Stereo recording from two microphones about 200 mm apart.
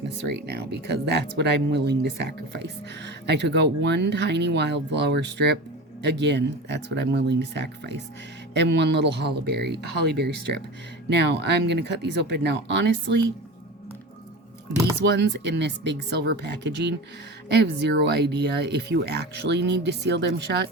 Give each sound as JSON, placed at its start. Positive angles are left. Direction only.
{"t": 0.4, "sound": "speech", "side_deg": -55}
{"t": 15.0, "sound": "speech", "side_deg": -60}